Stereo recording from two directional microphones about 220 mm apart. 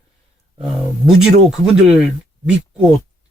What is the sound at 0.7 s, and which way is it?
Speech, centre (ahead or behind).